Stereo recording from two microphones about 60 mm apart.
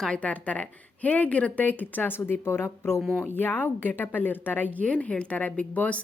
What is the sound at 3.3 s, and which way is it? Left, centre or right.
A woman's voice, left.